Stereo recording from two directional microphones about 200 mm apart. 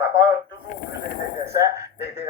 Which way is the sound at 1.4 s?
15° right (ahead or behind).